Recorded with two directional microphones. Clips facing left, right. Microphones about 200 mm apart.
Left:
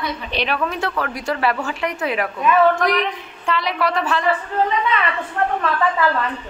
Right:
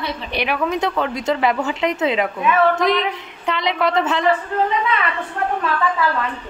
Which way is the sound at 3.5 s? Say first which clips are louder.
Right 1 dB; 20° right (ahead or behind).